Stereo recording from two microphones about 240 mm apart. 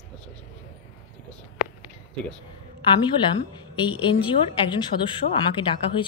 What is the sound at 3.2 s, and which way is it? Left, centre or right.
A woman's voice, centre.